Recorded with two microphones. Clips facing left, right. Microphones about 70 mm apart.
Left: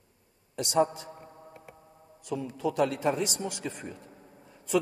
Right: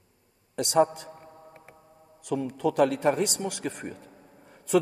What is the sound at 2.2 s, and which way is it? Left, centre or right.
A man's voice, right.